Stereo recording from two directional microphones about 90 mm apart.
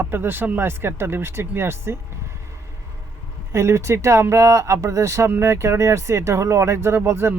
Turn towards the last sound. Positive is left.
turn(degrees=-30)  # may be behind; listen again after turning